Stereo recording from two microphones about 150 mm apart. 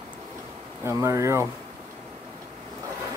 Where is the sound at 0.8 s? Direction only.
15° right (ahead or behind).